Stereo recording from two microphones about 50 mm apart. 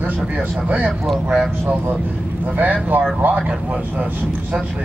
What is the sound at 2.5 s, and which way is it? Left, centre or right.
Speech, right.